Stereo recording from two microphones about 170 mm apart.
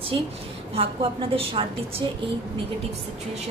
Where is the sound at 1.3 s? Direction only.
35° right (ahead or behind).